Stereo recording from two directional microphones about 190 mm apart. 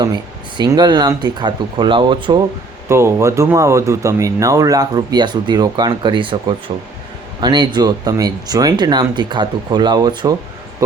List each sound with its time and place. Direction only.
0.0 s speech: 20° right (ahead or behind)
2.9 s speech: 15° right (ahead or behind)
7.4 s speech: 25° right (ahead or behind)